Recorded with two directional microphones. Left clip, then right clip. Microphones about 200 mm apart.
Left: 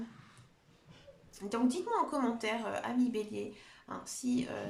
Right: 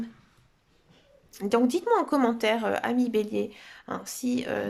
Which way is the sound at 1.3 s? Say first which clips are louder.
Right 10 dB; 50° right (ahead or behind).